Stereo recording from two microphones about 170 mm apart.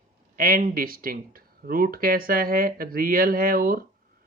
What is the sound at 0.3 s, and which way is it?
Speech, 55° right (ahead or behind).